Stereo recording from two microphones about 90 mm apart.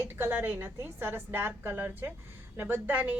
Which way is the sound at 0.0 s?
20° right (ahead or behind).